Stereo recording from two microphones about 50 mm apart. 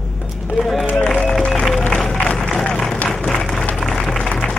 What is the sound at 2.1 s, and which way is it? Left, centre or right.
Crowd, centre.